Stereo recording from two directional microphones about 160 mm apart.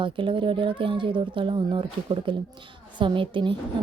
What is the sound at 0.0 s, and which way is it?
Speech, 30° right (ahead or behind).